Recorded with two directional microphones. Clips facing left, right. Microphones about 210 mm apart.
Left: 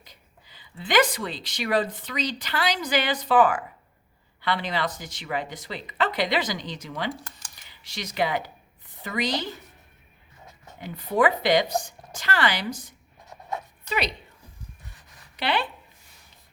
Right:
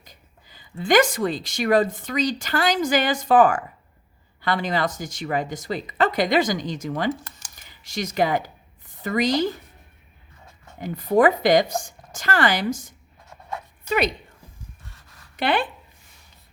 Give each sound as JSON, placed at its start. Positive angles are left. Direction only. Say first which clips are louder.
{"t": 0.0, "sound": "speech", "louder": "right 2 dB", "side_deg": -45}
{"t": 10.8, "sound": "speech", "louder": "right 5 dB", "side_deg": -45}
{"t": 13.9, "sound": "speech", "louder": "right 6 dB", "side_deg": -50}
{"t": 14.8, "sound": "a sound", "louder": "right 1 dB", "side_deg": 15}
{"t": 15.4, "sound": "speech", "louder": "right 4 dB", "side_deg": -50}